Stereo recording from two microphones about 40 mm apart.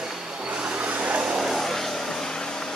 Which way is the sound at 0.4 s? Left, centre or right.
Right.